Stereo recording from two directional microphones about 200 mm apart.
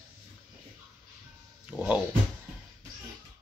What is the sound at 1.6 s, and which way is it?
Speech, 5° right (ahead or behind).